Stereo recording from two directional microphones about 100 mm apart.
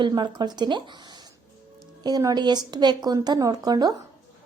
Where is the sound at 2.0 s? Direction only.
40° right (ahead or behind).